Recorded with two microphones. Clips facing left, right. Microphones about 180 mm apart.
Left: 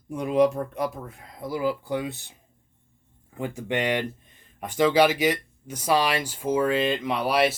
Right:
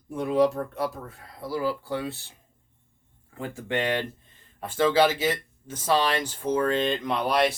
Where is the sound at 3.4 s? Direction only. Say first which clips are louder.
Left 1 dB; 15° left (ahead or behind).